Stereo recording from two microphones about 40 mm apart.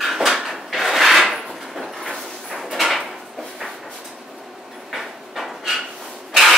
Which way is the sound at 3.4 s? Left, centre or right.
Centre.